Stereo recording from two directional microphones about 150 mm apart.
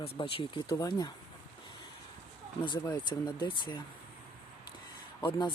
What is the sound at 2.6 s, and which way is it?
Speech, 30° left (ahead or behind).